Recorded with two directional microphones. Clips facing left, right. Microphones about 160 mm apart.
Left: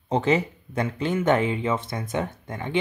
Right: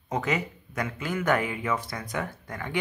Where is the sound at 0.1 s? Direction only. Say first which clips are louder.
Left 6 dB; 30° left (ahead or behind).